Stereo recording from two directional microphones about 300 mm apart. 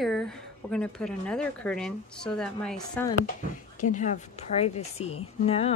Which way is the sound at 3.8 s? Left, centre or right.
Left.